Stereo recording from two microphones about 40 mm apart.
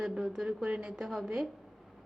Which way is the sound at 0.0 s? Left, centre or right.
Centre.